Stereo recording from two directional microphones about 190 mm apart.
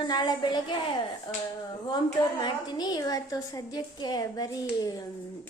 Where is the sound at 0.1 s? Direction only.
20° left (ahead or behind).